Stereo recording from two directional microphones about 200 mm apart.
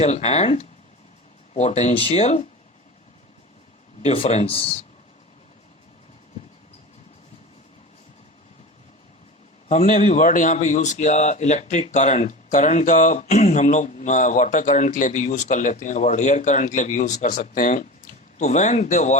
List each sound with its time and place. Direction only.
0.0 s a man's voice: 35° left (ahead or behind)
4.0 s a man's voice: 30° left (ahead or behind)
9.6 s a man's voice: 40° left (ahead or behind)